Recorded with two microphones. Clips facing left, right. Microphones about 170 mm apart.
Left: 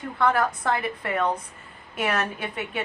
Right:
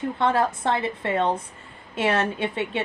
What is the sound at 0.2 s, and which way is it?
Speech, 25° right (ahead or behind).